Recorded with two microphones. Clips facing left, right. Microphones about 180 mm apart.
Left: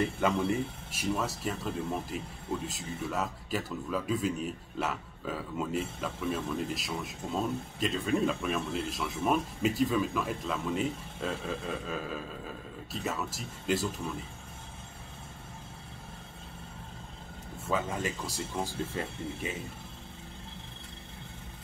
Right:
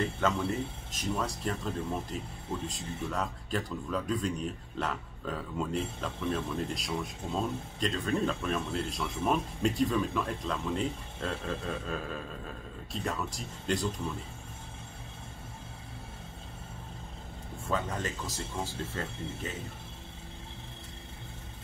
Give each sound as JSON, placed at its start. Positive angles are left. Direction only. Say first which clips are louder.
{"t": 0.0, "sound": "speech", "louder": "left 2 dB", "side_deg": 10}
{"t": 17.6, "sound": "speech", "louder": "left 1 dB", "side_deg": 10}